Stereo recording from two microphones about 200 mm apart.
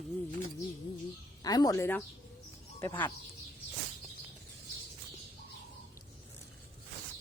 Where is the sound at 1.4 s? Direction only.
20° left (ahead or behind).